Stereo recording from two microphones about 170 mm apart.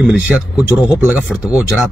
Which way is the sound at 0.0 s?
5° right (ahead or behind).